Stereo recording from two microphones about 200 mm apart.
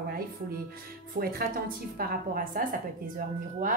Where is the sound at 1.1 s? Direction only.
50° right (ahead or behind).